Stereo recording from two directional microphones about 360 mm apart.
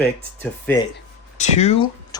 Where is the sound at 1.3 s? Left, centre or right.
Centre.